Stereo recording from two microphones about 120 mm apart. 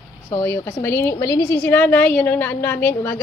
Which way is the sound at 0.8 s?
20° left (ahead or behind).